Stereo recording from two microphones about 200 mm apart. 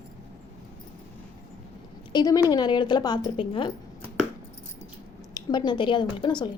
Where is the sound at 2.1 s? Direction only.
20° left (ahead or behind).